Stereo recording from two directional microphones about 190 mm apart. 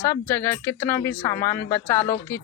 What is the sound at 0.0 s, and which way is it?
Speech, 10° left (ahead or behind).